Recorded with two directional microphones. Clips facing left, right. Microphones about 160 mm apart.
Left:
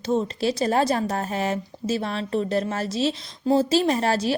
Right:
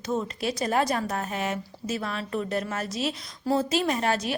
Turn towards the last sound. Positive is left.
turn(degrees=35)  # may be behind; listen again after turning